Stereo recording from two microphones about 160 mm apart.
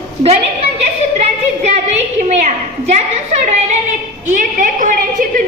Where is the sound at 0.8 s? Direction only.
45° right (ahead or behind).